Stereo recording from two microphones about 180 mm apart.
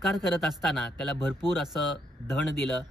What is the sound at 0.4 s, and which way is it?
Speech, 5° left (ahead or behind).